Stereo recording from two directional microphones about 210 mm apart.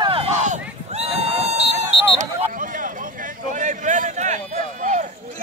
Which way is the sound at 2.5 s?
40° right (ahead or behind).